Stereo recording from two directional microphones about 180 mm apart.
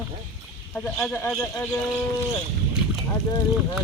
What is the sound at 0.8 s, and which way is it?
Speech, 5° left (ahead or behind).